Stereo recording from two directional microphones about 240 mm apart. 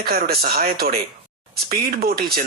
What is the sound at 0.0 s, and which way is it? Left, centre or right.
Speech, right.